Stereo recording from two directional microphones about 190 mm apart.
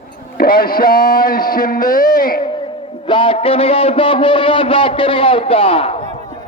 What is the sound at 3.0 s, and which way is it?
A man's voice, 25° left (ahead or behind).